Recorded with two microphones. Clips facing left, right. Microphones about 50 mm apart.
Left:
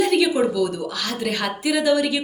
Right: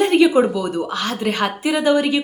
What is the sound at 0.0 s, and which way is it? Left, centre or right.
A woman's voice, right.